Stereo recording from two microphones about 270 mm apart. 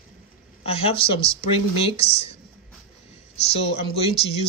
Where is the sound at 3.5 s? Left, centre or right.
Left.